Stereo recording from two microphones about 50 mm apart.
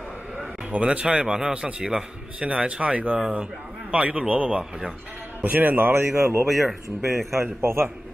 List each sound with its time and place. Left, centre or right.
0.7 s speech: right
5.4 s a man's voice: right
6.4 s speech: centre
7.4 s a man's voice: right